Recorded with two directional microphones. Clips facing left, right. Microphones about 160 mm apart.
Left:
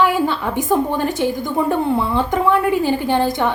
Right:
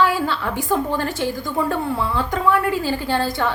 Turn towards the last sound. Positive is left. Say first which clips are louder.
# left 4 dB
turn(degrees=20)  # may be behind; listen again after turning